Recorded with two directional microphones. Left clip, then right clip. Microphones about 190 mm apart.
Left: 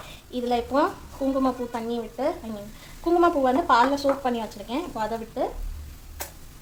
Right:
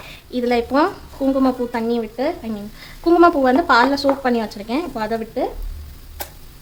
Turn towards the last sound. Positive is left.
turn(degrees=-30)  # may be behind; listen again after turning